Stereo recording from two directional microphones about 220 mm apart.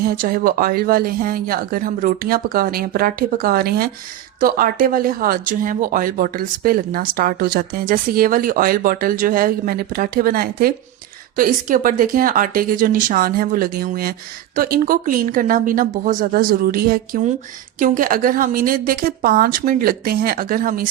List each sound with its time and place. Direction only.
0.0 s speech: 40° right (ahead or behind)